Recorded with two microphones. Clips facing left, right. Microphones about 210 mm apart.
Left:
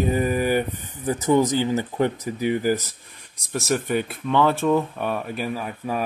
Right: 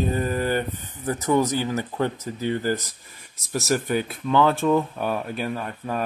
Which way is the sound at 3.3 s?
Centre (ahead or behind).